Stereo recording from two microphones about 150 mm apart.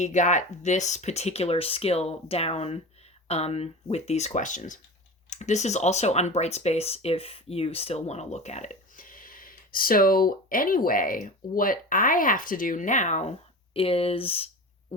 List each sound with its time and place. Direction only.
0.0 s speech: 55° left (ahead or behind)
13.7 s speech: 40° left (ahead or behind)